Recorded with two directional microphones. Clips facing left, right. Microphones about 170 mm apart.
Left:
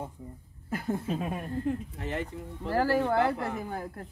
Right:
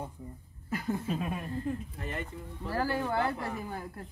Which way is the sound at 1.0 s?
35° left (ahead or behind).